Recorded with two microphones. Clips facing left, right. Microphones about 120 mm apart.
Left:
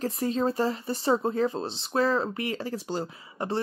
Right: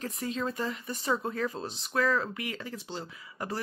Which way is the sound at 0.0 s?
35° left (ahead or behind).